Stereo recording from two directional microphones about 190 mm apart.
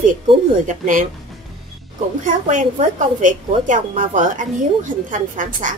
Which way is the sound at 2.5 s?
40° right (ahead or behind).